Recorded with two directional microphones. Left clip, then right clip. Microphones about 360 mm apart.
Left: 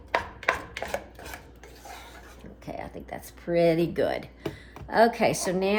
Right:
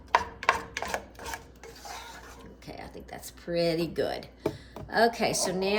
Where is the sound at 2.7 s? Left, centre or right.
Centre.